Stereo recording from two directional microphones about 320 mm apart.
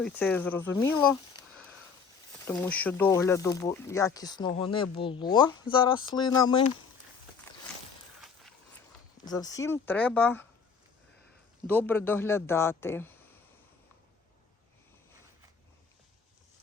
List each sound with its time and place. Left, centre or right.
0.0 s speech: centre
8.2 s a sound: centre
9.2 s speech: centre
11.6 s speech: centre